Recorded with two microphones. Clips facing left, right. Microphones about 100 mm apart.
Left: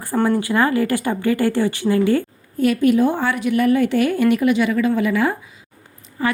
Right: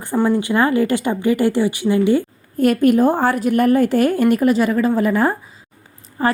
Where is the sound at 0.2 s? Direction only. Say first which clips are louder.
Right 1 dB; 20° right (ahead or behind).